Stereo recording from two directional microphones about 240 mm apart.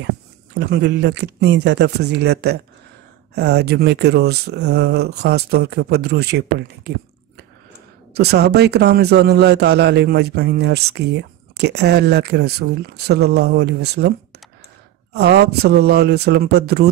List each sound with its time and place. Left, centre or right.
0.6 s speech: right
8.1 s speech: right